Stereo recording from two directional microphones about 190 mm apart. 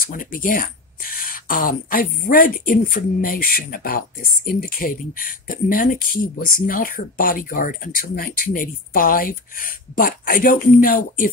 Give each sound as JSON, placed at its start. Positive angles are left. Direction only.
{"t": 0.0, "sound": "speech", "side_deg": 50}